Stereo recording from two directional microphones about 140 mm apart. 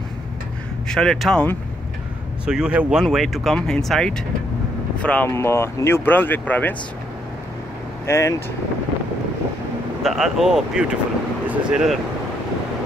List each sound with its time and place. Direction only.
0.8 s speech: 5° left (ahead or behind)
2.4 s speech: 5° right (ahead or behind); by 6.7 s 10° left (ahead or behind)
8.1 s speech: 20° left (ahead or behind)
10.0 s speech: centre (ahead or behind)